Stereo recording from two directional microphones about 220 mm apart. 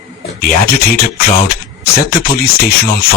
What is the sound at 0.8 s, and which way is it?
Speech, 45° left (ahead or behind).